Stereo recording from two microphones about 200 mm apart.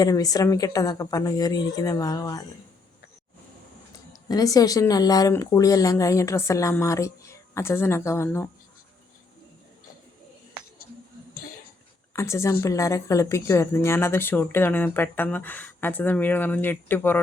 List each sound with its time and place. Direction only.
0.0 s a woman's voice: 20° left (ahead or behind)
3.9 s a woman's voice: 20° left (ahead or behind)
12.1 s a woman's voice: 15° left (ahead or behind)